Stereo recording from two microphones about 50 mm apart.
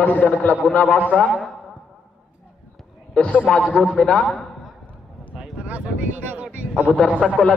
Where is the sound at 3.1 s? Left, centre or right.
Left.